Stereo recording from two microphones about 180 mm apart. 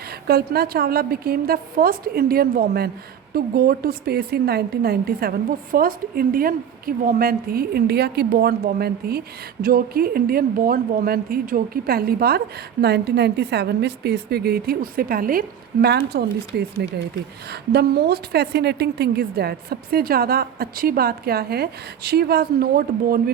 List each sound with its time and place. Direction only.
0.1 s a woman's voice: 60° right (ahead or behind)